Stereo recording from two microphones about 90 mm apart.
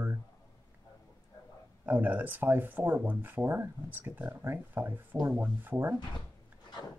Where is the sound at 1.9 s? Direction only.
20° right (ahead or behind).